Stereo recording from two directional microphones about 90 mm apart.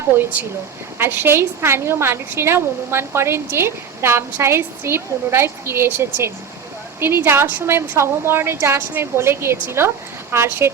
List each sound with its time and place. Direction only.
0.9 s a woman's voice: 25° right (ahead or behind)